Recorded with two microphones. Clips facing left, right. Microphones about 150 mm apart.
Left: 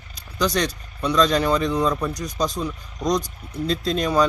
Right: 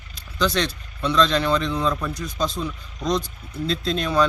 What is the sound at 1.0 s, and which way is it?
A man's voice, 10° left (ahead or behind).